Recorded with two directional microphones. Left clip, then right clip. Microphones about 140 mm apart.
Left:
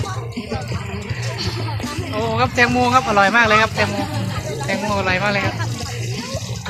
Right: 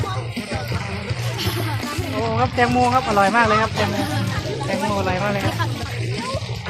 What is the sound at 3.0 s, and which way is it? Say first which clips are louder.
Speech: left 2 dB; 10° left (ahead or behind).